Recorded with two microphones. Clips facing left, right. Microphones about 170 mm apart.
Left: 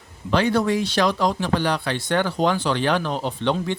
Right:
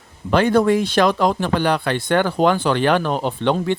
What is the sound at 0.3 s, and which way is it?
Speech, 50° right (ahead or behind).